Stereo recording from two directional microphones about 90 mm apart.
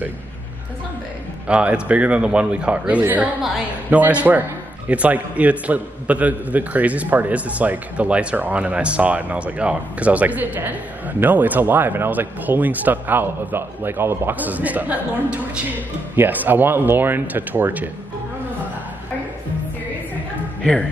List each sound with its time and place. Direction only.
1.5 s a man's voice: 15° right (ahead or behind)